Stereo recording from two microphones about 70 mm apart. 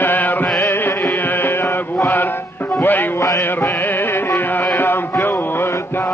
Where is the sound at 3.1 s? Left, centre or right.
Left.